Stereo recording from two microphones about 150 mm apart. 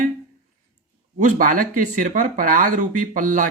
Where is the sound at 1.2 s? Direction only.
60° right (ahead or behind).